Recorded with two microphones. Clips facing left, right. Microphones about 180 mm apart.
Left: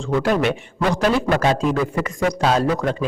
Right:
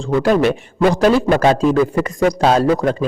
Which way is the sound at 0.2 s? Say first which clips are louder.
Right 5 dB; 35° right (ahead or behind).